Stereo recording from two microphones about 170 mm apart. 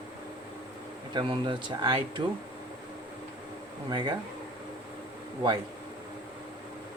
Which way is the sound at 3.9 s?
25° right (ahead or behind).